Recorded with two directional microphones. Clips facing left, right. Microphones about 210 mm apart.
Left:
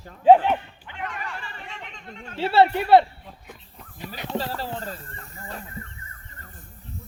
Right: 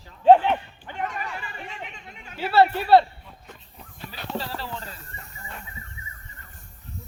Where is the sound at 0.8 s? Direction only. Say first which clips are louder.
Right 6 dB; 40° right (ahead or behind).